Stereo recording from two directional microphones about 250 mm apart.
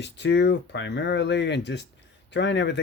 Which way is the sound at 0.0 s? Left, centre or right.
Left.